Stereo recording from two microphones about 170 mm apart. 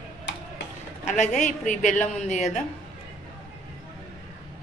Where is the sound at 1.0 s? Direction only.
45° left (ahead or behind).